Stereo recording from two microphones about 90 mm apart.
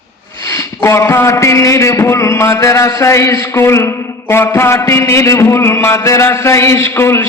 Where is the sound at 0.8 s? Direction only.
35° left (ahead or behind).